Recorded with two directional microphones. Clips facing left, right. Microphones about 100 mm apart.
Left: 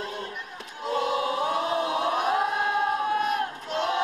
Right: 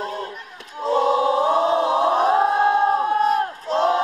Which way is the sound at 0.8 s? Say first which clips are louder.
Right 8 dB; 30° right (ahead or behind).